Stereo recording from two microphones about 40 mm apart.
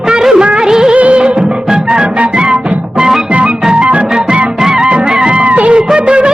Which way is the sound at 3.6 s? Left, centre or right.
Right.